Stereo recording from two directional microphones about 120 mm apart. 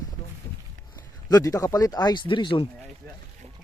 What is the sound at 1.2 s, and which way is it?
Speech, 30° left (ahead or behind).